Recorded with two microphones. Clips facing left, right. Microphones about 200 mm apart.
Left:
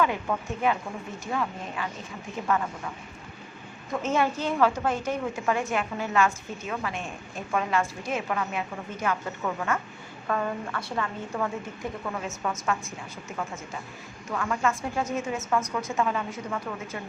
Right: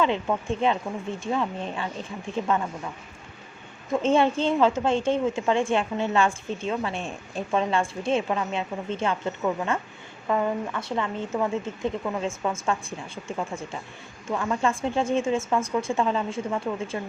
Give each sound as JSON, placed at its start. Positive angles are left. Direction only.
{"t": 0.0, "sound": "a woman's voice", "side_deg": -25}
{"t": 4.0, "sound": "a woman's voice", "side_deg": -25}